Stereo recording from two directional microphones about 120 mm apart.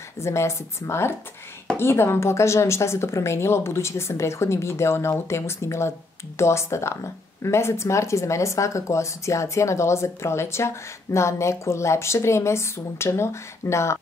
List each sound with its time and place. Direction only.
0.2 s speech: 25° left (ahead or behind)